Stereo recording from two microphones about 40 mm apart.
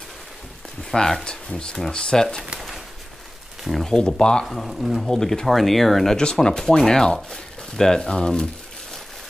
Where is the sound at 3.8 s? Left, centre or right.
Left.